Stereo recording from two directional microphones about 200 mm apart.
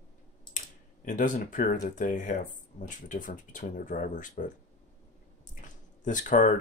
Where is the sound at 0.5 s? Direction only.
40° left (ahead or behind).